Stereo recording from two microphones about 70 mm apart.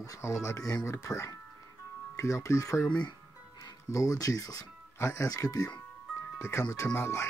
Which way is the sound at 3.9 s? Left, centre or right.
Left.